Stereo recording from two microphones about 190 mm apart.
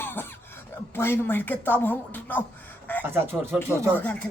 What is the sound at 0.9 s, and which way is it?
Speech, 10° left (ahead or behind).